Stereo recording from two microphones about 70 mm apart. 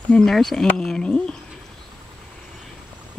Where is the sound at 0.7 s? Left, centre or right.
Centre.